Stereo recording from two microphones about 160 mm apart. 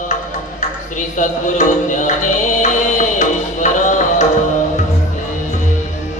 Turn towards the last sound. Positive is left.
turn(degrees=50)  # may be behind; listen again after turning